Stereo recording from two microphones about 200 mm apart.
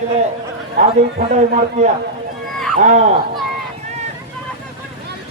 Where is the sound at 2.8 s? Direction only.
40° right (ahead or behind).